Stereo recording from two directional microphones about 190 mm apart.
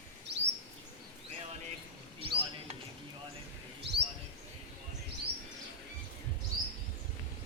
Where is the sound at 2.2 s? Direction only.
30° right (ahead or behind).